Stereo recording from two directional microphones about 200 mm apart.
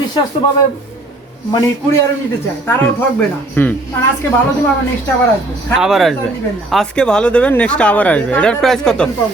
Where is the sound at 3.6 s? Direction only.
10° left (ahead or behind).